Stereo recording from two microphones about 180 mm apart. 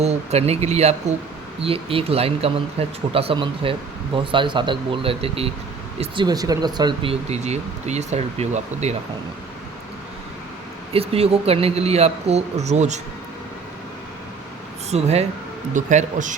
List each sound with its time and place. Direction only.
0.0 s speech: 35° right (ahead or behind)
10.9 s speech: 35° right (ahead or behind)
14.8 s speech: 35° right (ahead or behind)